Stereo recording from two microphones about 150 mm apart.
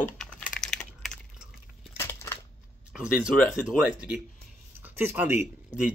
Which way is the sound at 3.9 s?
10° right (ahead or behind).